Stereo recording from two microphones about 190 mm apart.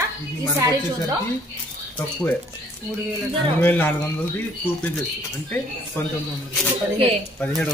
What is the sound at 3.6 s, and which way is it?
Speech, 10° left (ahead or behind).